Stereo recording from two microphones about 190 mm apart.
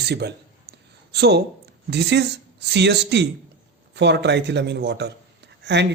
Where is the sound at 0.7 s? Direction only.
60° right (ahead or behind).